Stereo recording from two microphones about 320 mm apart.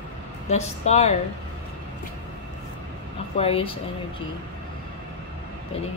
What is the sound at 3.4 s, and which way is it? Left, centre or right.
Speech, centre.